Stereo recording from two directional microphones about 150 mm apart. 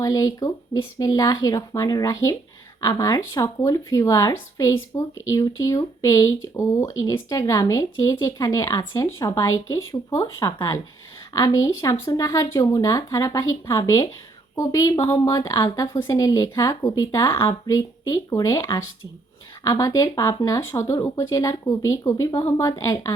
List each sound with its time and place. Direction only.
0.0 s speech: 25° left (ahead or behind)